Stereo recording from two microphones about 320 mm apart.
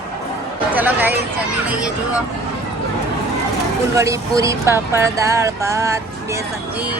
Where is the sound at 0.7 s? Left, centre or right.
Centre.